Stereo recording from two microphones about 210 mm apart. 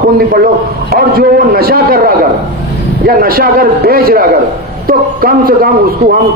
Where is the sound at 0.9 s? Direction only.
45° right (ahead or behind).